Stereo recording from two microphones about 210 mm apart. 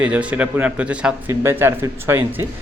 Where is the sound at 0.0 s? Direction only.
5° right (ahead or behind).